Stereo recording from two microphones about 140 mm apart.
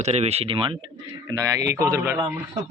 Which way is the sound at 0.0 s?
50° right (ahead or behind).